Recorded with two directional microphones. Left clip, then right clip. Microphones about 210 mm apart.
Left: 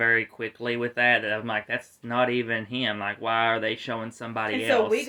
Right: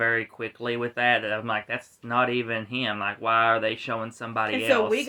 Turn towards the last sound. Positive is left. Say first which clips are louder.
# right 1 dB
turn(degrees=5)  # may be behind; listen again after turning